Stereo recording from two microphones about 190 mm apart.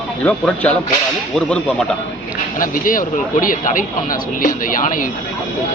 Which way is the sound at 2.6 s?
45° left (ahead or behind).